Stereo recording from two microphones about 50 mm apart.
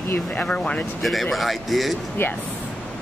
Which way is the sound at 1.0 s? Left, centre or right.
Centre.